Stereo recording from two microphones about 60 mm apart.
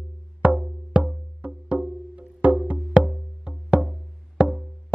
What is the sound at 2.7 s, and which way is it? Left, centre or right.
Music, centre.